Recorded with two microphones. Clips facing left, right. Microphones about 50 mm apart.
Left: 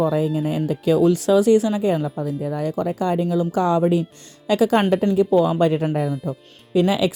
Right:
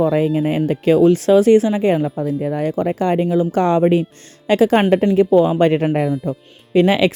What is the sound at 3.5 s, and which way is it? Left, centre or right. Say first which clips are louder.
A woman's voice: right 3 dB; right.